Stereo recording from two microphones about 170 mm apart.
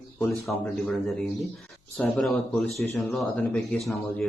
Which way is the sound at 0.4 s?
5° left (ahead or behind).